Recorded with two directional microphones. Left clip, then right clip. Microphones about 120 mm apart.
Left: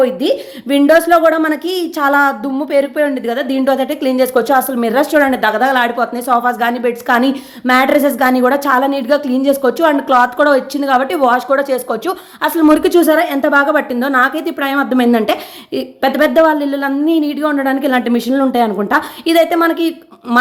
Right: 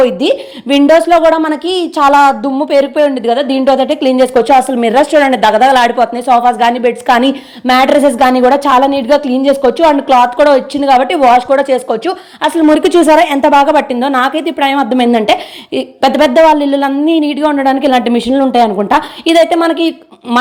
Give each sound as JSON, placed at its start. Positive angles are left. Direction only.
{"t": 0.3, "sound": "a woman's voice", "side_deg": -20}
{"t": 1.0, "sound": "speech", "side_deg": -5}
{"t": 1.6, "sound": "a woman's voice", "side_deg": 30}
{"t": 2.6, "sound": "speech", "side_deg": -20}
{"t": 13.0, "sound": "a woman's voice", "side_deg": -25}
{"t": 13.7, "sound": "speech", "side_deg": -15}